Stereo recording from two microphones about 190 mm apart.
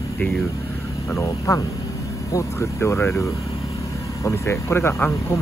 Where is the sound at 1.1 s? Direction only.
15° left (ahead or behind).